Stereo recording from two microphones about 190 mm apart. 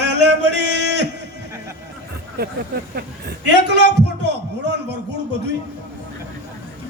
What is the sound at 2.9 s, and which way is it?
A man's voice, 60° right (ahead or behind).